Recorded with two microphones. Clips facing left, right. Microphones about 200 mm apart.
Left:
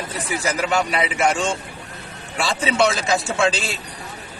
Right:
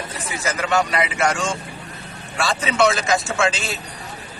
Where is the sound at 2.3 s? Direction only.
30° left (ahead or behind).